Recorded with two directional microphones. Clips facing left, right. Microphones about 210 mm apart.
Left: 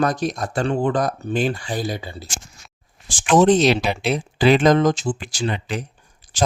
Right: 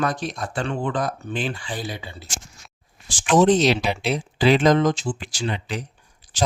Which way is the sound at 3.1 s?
50° left (ahead or behind).